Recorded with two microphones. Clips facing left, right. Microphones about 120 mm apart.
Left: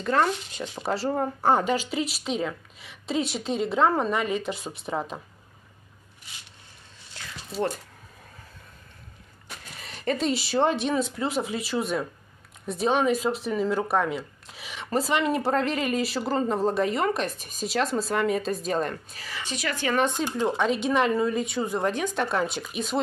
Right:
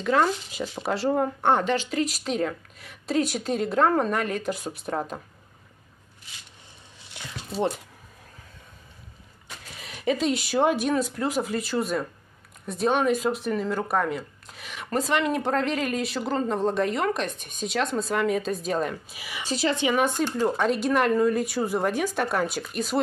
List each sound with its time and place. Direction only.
0.0 s speech: 5° right (ahead or behind)
9.8 s speech: centre (ahead or behind)
19.4 s a woman's voice: 30° right (ahead or behind)
19.9 s speech: 10° right (ahead or behind)